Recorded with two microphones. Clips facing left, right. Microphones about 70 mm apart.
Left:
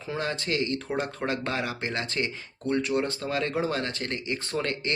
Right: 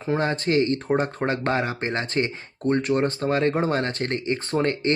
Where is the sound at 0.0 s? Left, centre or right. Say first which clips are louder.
Right 7 dB; right.